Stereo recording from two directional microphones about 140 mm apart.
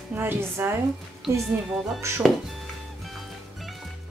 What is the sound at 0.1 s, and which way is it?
Speech, 15° right (ahead or behind).